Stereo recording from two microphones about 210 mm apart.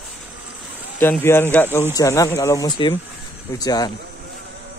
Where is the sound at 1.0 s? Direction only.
10° left (ahead or behind).